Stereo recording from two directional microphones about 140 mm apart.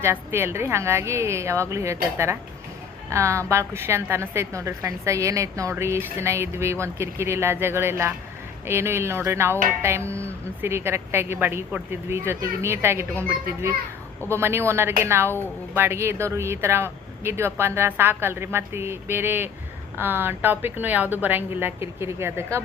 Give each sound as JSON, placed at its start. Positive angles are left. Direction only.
{"t": 0.0, "sound": "a woman's voice", "side_deg": -15}
{"t": 14.3, "sound": "speech", "side_deg": -20}